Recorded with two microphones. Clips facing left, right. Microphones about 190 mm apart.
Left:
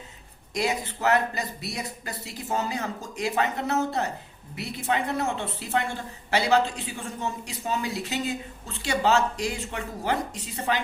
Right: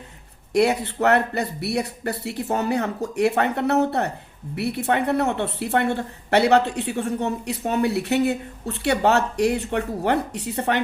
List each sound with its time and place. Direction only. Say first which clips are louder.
0.5 s a woman's voice: right 8 dB; 65° right (ahead or behind)